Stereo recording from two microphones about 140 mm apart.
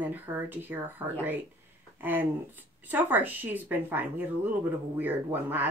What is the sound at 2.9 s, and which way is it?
A woman's voice, 10° right (ahead or behind).